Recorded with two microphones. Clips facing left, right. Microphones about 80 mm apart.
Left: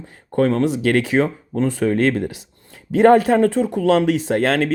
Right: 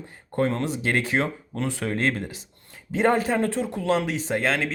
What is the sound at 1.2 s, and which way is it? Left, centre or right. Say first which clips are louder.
Speech: left 8 dB; left.